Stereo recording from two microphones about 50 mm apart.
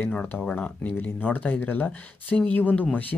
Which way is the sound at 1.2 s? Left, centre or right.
Left.